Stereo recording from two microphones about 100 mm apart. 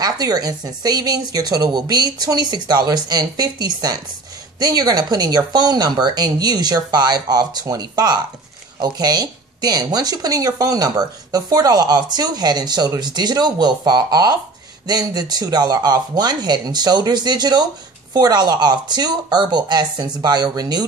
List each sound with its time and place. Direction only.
0.0 s speech: 40° right (ahead or behind)